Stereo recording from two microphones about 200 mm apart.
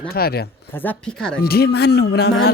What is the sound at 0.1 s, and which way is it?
Speech, 50° left (ahead or behind).